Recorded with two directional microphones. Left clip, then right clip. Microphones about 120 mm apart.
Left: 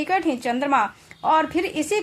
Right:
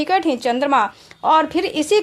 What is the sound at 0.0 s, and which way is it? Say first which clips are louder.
A woman's voice: right 5 dB; 35° right (ahead or behind).